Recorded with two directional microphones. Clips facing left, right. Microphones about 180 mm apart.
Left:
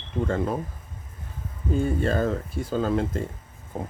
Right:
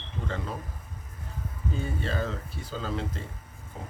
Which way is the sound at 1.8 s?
45° left (ahead or behind).